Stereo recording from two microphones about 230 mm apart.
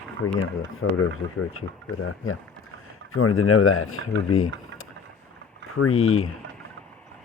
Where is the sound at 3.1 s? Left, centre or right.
Left.